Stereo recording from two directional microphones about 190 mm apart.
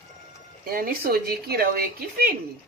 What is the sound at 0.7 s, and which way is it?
Speech, 50° right (ahead or behind).